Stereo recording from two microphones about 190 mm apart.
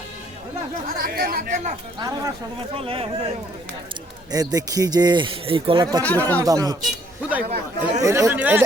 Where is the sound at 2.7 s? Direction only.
30° right (ahead or behind).